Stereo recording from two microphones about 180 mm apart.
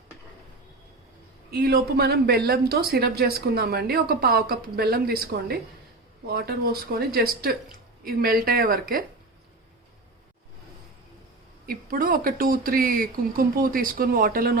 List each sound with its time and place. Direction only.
1.5 s a man's voice: 60° right (ahead or behind)
11.6 s speech: 55° right (ahead or behind)